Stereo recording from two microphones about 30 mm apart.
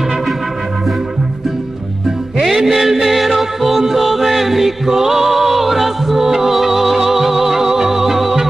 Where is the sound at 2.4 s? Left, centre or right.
Centre.